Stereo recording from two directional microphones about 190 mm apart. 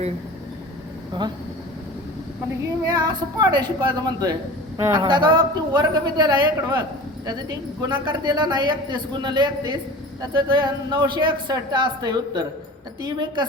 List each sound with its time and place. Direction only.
1.1 s a woman's voice: 25° right (ahead or behind)
2.6 s a woman's voice: 20° right (ahead or behind)
5.0 s a woman's voice: 25° right (ahead or behind)